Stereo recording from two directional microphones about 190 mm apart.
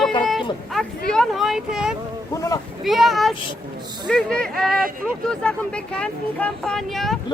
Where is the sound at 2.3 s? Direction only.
20° left (ahead or behind).